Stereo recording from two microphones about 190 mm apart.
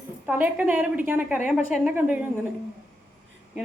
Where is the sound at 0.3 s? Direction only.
10° right (ahead or behind).